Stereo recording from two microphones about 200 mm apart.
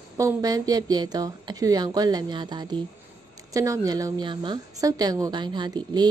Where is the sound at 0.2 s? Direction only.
15° right (ahead or behind).